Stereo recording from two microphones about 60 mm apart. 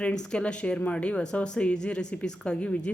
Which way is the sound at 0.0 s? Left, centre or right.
Centre.